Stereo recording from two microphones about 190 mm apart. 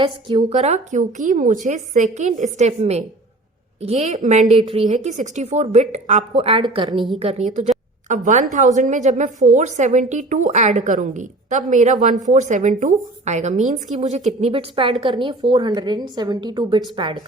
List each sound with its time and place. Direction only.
0.0 s a woman's voice: 25° right (ahead or behind)
0.5 s a woman's voice: 35° right (ahead or behind)
6.3 s a woman's voice: 30° right (ahead or behind)